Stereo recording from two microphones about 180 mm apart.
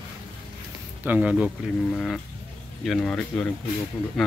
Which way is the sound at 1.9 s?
5° left (ahead or behind).